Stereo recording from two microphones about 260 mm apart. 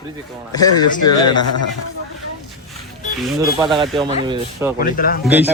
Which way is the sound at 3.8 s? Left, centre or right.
Centre.